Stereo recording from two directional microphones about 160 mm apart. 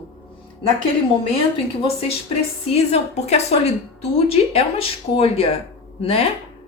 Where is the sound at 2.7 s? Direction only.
40° left (ahead or behind).